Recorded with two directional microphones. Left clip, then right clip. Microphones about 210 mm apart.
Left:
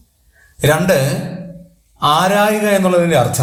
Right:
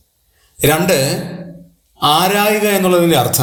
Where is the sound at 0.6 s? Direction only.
20° right (ahead or behind).